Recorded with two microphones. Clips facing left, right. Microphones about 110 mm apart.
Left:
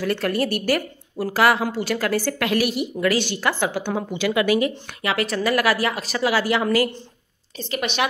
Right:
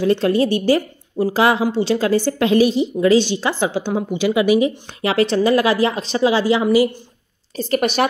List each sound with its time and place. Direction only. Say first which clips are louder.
0.0 s a woman's voice: right 6 dB; 25° right (ahead or behind)
5.0 s a woman's voice: right 7 dB; 30° right (ahead or behind)
7.5 s a woman's voice: right 7 dB; 45° right (ahead or behind)